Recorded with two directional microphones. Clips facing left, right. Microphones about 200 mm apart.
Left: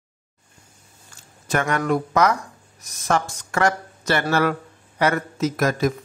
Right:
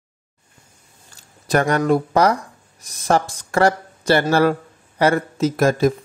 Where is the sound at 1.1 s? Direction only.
35° right (ahead or behind).